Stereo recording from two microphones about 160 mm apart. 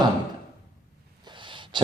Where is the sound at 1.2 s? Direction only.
30° right (ahead or behind).